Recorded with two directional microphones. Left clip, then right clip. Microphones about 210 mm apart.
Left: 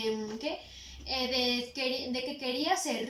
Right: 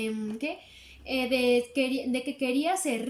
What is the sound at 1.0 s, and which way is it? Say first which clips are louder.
A child's voice: right 4 dB; 55° right (ahead or behind).